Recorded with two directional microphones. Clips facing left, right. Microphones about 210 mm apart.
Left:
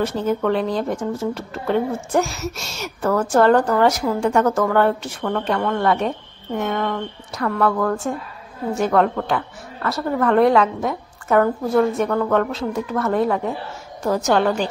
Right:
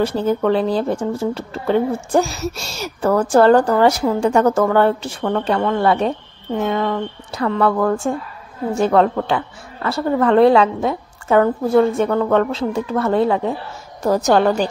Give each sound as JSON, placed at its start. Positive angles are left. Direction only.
{"t": 0.0, "sound": "a woman's voice", "side_deg": -30}